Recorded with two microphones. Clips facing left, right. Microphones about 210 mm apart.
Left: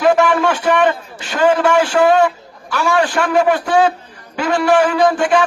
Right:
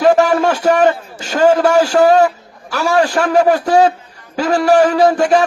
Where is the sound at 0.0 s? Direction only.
40° right (ahead or behind).